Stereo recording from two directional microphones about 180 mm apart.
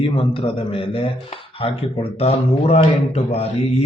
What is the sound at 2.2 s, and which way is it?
Speech, 35° left (ahead or behind).